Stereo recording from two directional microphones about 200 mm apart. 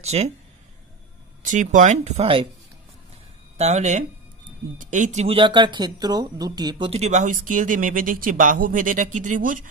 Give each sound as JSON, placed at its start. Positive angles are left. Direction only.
{"t": 0.0, "sound": "speech", "side_deg": -30}
{"t": 1.4, "sound": "speech", "side_deg": -40}
{"t": 3.5, "sound": "speech", "side_deg": -35}